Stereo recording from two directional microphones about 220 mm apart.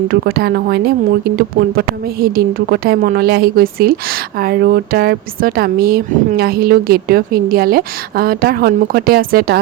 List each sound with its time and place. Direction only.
0.1 s speech: 45° right (ahead or behind)
2.2 s speech: 45° right (ahead or behind)